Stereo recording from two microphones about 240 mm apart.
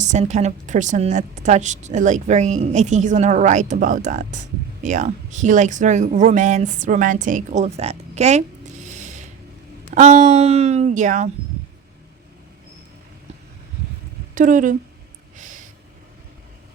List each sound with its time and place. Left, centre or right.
0.0 s a woman's voice: right
14.3 s speech: right
15.4 s a sound: right